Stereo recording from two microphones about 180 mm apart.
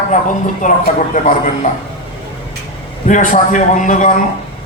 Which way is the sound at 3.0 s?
45° left (ahead or behind).